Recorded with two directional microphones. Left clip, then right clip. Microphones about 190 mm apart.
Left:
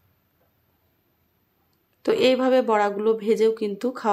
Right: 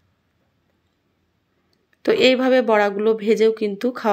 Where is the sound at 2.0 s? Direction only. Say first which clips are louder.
Right 4 dB; 15° right (ahead or behind).